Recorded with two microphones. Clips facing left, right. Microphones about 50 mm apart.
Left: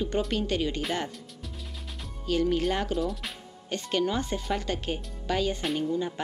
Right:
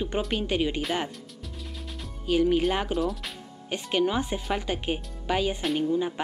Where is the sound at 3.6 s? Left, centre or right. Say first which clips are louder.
Right 2 dB; centre.